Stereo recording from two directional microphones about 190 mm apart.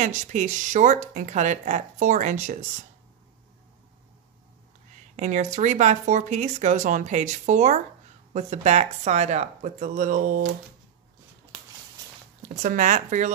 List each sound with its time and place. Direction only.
0.0 s speech: 40° right (ahead or behind)
5.1 s speech: 40° right (ahead or behind)
12.6 s speech: 40° right (ahead or behind)